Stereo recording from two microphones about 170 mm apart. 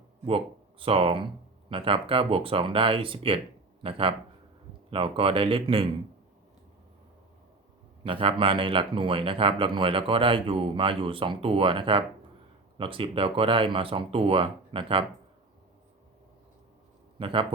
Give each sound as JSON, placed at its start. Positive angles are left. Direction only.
{"t": 0.3, "sound": "speech", "side_deg": -35}
{"t": 8.0, "sound": "speech", "side_deg": -30}
{"t": 17.2, "sound": "speech", "side_deg": -30}